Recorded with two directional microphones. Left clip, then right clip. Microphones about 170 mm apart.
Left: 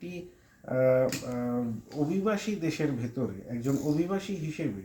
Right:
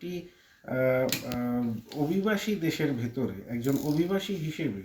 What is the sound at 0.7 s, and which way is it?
Speech, 15° left (ahead or behind).